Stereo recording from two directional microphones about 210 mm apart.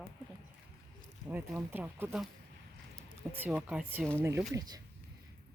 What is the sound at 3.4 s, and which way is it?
Speech, 5° right (ahead or behind).